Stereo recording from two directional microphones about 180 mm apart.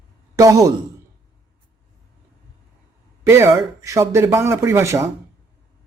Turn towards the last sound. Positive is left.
turn(degrees=-15)  # may be behind; listen again after turning